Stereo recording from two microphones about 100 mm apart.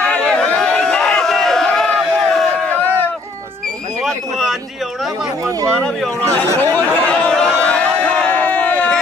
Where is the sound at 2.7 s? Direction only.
20° left (ahead or behind).